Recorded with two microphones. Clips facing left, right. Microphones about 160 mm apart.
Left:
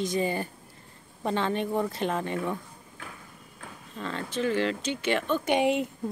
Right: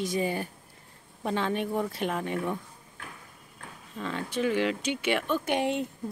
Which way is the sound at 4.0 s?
5° right (ahead or behind).